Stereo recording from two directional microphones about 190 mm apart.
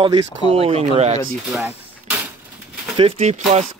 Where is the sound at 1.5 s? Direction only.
Centre (ahead or behind).